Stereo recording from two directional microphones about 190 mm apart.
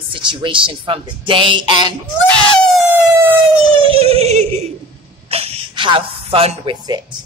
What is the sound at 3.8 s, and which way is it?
Singing, 30° right (ahead or behind).